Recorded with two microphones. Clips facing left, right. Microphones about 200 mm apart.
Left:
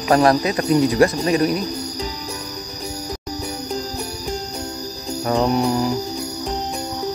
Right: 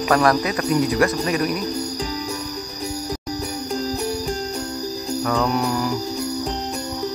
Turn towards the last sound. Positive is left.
turn(degrees=25)  # may be behind; listen again after turning